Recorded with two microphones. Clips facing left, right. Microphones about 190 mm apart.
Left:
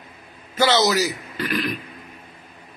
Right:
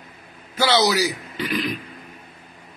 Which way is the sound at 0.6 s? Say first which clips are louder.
Left 1 dB; 10° right (ahead or behind).